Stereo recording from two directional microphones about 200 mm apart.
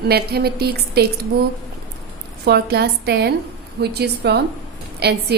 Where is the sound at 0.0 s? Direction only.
50° right (ahead or behind).